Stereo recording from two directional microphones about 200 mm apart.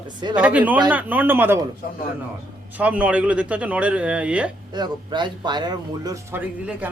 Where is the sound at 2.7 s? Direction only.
10° right (ahead or behind).